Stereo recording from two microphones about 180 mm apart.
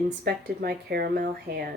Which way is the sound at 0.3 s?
60° right (ahead or behind).